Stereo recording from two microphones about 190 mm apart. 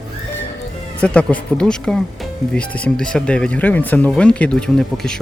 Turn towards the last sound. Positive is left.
turn(degrees=5)  # may be behind; listen again after turning